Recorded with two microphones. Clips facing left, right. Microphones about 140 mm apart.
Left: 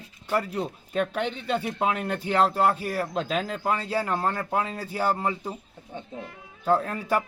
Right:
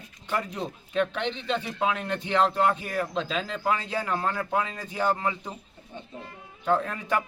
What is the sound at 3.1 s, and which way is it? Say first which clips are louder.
Speech: left 2 dB; 50° left (ahead or behind).